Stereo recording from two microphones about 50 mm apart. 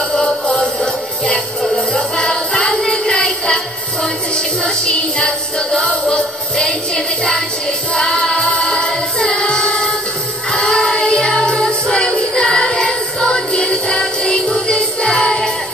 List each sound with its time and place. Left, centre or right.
0.1 s music: left
2.1 s music: centre
7.9 s music: centre
15.2 s jingle bell: centre